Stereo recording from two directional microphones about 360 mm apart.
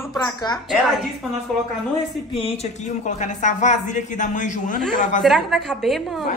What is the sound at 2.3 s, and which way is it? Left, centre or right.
Speech, centre.